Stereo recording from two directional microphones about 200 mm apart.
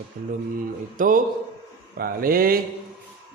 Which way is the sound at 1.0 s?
40° right (ahead or behind).